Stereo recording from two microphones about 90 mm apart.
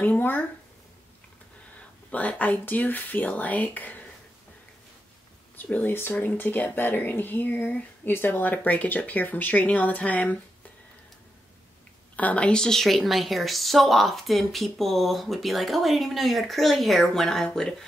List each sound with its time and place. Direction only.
0.0 s speech: 20° left (ahead or behind)
1.8 s speech: 15° left (ahead or behind)
5.6 s speech: 20° left (ahead or behind)
12.2 s a woman's voice: 15° left (ahead or behind)